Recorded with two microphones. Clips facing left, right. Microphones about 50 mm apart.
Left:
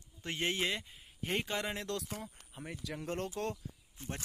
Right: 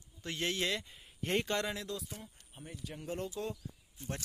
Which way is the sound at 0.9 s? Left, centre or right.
Centre.